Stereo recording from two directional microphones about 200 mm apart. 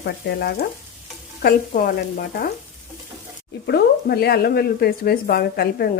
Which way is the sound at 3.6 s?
55° left (ahead or behind).